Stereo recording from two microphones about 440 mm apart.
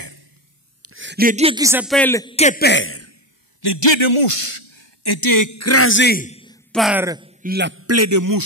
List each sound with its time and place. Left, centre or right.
0.8 s a man's voice: right; by 3.2 s left
3.6 s speech: left; by 8.4 s right